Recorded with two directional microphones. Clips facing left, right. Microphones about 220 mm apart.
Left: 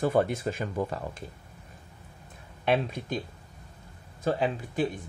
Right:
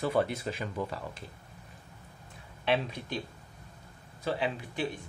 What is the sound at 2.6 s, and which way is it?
Speech, 50° left (ahead or behind).